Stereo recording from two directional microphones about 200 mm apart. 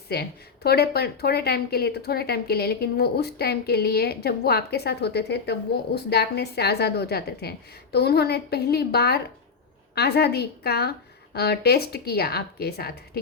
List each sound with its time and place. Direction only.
0.1 s a woman's voice: 50° left (ahead or behind)